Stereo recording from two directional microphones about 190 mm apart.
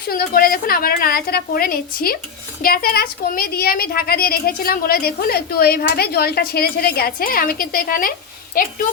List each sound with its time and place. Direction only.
0.1 s speech: 50° left (ahead or behind)